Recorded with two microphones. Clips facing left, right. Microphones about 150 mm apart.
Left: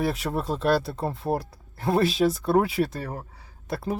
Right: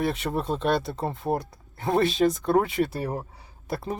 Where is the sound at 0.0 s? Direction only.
Centre (ahead or behind).